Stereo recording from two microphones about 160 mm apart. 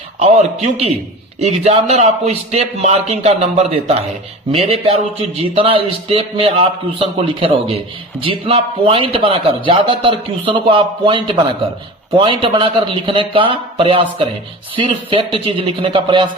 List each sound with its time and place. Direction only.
0.2 s a man's voice: 40° right (ahead or behind)